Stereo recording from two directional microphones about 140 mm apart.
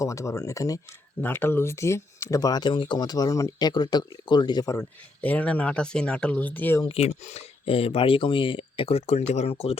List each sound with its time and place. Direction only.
0.0 s speech: 20° left (ahead or behind)
5.2 s speech: 10° left (ahead or behind)
6.8 s speech: 50° left (ahead or behind)